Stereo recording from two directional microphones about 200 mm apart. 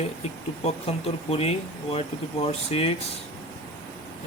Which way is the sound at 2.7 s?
30° left (ahead or behind).